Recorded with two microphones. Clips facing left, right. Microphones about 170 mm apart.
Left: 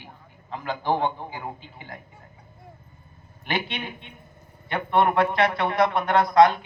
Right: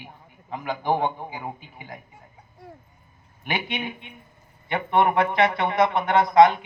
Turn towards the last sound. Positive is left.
turn(degrees=-20)  # may be behind; listen again after turning